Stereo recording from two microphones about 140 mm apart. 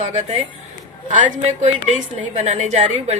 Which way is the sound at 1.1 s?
65° right (ahead or behind).